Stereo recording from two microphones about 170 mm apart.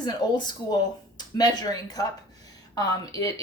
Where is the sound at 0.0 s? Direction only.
25° left (ahead or behind).